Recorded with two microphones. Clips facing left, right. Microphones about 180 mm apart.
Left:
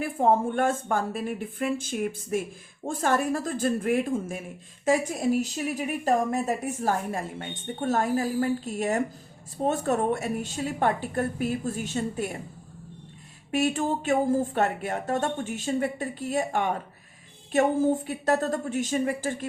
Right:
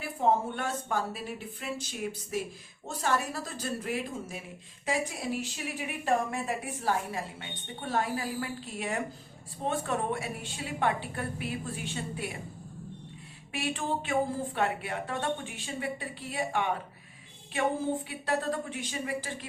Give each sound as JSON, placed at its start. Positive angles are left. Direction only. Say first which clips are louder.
{"t": 0.0, "sound": "a woman's voice", "louder": "left 5 dB", "side_deg": 50}
{"t": 13.5, "sound": "a woman's voice", "louder": "left 7 dB", "side_deg": 45}